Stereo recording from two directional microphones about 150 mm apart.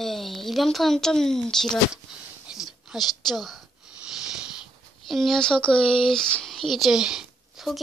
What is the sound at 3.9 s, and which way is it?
Sniff, 5° right (ahead or behind).